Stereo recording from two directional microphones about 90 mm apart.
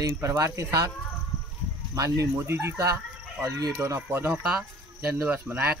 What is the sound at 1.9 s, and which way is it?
Speech, 35° right (ahead or behind).